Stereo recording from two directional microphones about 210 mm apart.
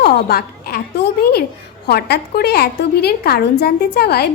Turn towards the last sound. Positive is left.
turn(degrees=50)  # may be behind; listen again after turning